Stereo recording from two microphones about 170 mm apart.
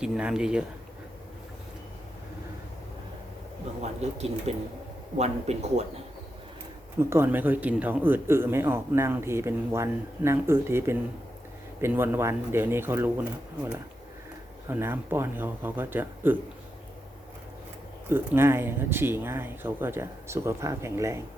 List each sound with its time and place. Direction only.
0.0 s speech: 5° right (ahead or behind)
4.0 s speech: 40° right (ahead or behind)
7.0 s speech: 15° right (ahead or behind)
14.7 s speech: 15° right (ahead or behind)
18.1 s speech: 15° right (ahead or behind)